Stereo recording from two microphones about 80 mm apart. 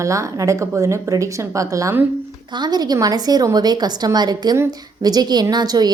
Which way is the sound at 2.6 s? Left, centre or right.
Right.